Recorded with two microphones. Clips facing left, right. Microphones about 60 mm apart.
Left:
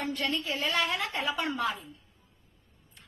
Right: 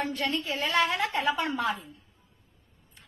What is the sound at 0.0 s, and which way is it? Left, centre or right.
A woman's voice, right.